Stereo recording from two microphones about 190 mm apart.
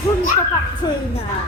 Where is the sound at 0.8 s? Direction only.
20° left (ahead or behind).